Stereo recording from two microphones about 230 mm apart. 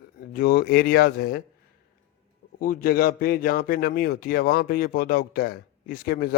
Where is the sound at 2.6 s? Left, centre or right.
Left.